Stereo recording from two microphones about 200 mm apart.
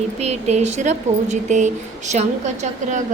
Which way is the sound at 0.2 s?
35° right (ahead or behind).